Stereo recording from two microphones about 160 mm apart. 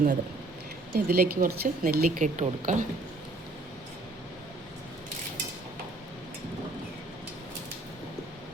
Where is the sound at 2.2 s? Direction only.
50° right (ahead or behind).